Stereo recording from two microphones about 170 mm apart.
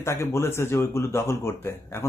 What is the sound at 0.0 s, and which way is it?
Speech, 15° left (ahead or behind).